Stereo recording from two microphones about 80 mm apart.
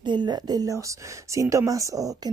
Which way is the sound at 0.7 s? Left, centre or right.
Right.